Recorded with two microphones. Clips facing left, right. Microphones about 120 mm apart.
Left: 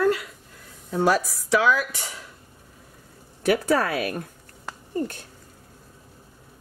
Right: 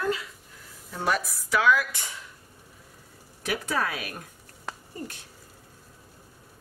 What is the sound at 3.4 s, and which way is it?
Speech, 60° left (ahead or behind).